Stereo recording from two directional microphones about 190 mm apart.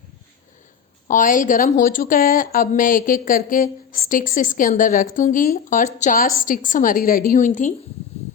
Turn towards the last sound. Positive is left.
turn(degrees=40)  # may be behind; listen again after turning